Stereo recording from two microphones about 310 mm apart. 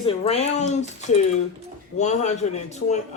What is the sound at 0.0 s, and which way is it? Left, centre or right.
Speech, centre.